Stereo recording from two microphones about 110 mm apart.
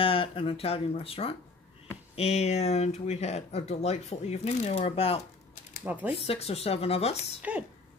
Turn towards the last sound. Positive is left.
turn(degrees=-10)  # may be behind; listen again after turning